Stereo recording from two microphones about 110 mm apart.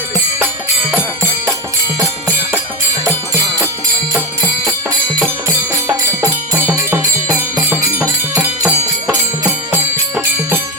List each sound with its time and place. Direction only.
5.2 s music: 20° right (ahead or behind)
8.4 s music: 10° right (ahead or behind)
9.1 s music: 20° right (ahead or behind)